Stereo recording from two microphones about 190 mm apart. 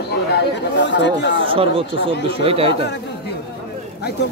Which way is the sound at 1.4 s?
30° right (ahead or behind).